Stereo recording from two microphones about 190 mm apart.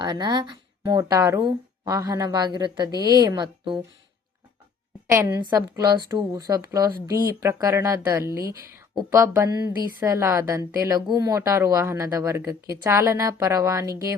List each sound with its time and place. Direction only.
0.0 s speech: 20° right (ahead or behind)
5.1 s a woman's voice: 20° right (ahead or behind)